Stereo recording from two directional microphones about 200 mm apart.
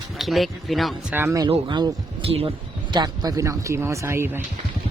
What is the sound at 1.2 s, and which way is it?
Speech, 15° right (ahead or behind).